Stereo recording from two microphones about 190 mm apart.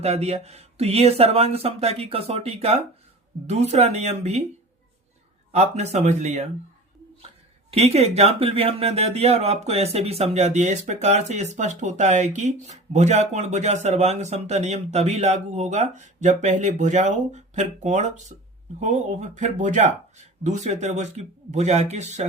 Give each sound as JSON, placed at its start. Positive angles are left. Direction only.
{"t": 0.0, "sound": "speech", "side_deg": -35}
{"t": 5.5, "sound": "speech", "side_deg": -35}
{"t": 7.7, "sound": "speech", "side_deg": -35}